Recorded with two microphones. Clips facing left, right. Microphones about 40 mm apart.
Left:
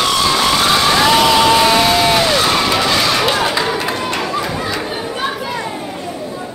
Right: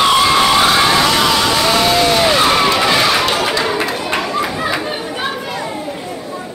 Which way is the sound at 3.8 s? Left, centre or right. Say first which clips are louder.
Even; centre.